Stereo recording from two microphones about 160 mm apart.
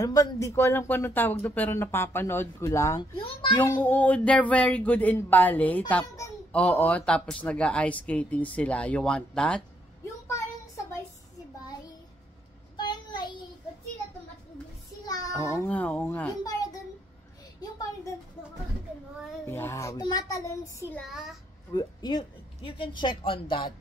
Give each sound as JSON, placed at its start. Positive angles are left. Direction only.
{"t": 0.0, "sound": "speech", "side_deg": 20}
{"t": 3.0, "sound": "speech", "side_deg": 30}
{"t": 3.5, "sound": "speech", "side_deg": 10}
{"t": 10.0, "sound": "a sound", "side_deg": 20}
{"t": 12.7, "sound": "child singing", "side_deg": 25}
{"t": 15.0, "sound": "a child's voice", "side_deg": 20}
{"t": 17.6, "sound": "a sound", "side_deg": 25}
{"t": 19.4, "sound": "a child's voice", "side_deg": 15}
{"t": 21.0, "sound": "a child's voice", "side_deg": 0}
{"t": 21.7, "sound": "speech", "side_deg": 25}